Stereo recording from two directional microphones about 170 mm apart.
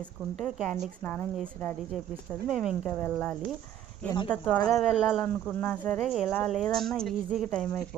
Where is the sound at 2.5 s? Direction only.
5° right (ahead or behind).